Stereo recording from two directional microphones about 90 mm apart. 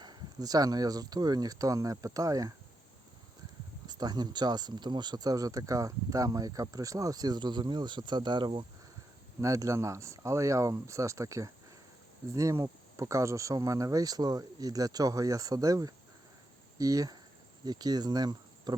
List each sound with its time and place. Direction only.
0.0 s speech: 50° right (ahead or behind)
3.8 s speech: 50° right (ahead or behind)
9.4 s speech: 35° right (ahead or behind)